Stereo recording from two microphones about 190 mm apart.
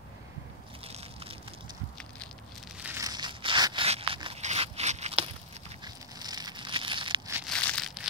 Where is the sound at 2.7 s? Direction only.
10° right (ahead or behind).